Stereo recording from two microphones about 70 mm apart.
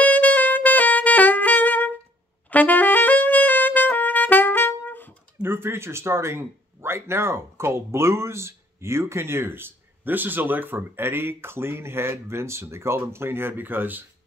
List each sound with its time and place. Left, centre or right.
0.0 s saxophone: left
2.5 s brass instrument: left
5.4 s speech: right